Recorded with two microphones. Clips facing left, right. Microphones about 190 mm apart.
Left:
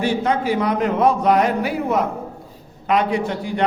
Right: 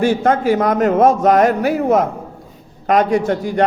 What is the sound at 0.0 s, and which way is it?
A man's voice, 45° right (ahead or behind).